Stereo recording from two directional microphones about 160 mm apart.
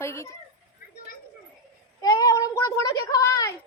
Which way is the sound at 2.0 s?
20° left (ahead or behind).